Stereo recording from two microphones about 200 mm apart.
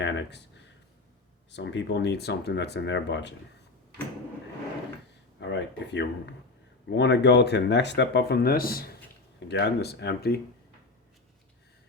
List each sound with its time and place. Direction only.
0.0 s speech: 60° left (ahead or behind)
1.5 s speech: 60° left (ahead or behind)
5.4 s speech: 60° left (ahead or behind)